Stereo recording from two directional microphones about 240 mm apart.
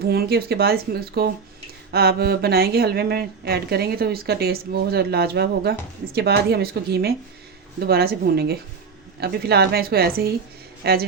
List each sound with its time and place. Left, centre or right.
0.1 s a woman's voice: right